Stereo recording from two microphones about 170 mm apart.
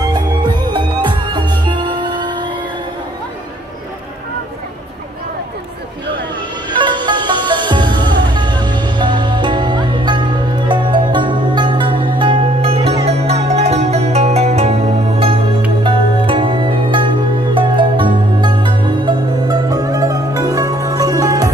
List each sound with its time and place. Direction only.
0.0 s music: 25° right (ahead or behind)
6.7 s music: 25° right (ahead or behind)